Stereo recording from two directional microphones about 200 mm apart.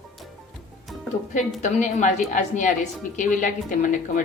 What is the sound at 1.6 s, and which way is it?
A woman's voice, 40° left (ahead or behind).